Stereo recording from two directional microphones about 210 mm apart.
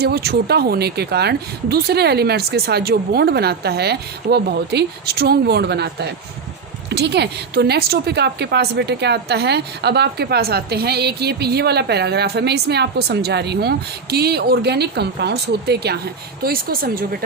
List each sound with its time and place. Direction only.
0.0 s a woman's voice: 50° right (ahead or behind)